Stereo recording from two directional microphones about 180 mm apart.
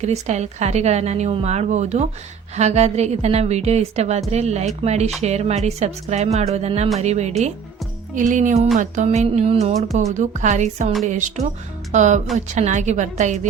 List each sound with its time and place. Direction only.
0.0 s a woman's voice: 40° right (ahead or behind)